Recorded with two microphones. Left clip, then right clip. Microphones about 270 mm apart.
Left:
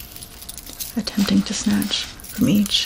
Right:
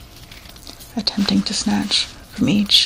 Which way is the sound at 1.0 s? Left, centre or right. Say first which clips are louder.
Right 2 dB; centre.